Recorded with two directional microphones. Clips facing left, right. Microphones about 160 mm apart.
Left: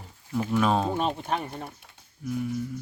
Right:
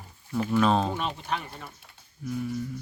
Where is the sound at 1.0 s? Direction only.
50° left (ahead or behind).